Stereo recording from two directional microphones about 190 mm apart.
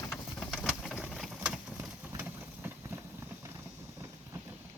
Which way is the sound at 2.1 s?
10° right (ahead or behind).